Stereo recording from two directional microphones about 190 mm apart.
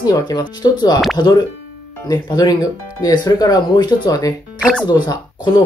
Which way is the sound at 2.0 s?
20° left (ahead or behind).